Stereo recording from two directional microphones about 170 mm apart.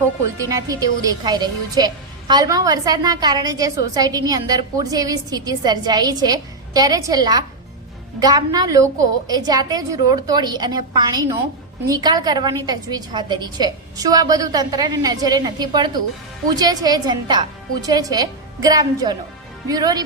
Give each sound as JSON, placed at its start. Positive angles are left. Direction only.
{"t": 0.3, "sound": "a woman's voice", "side_deg": -20}